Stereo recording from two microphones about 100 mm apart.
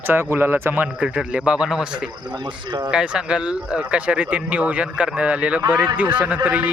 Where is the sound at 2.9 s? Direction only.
10° right (ahead or behind).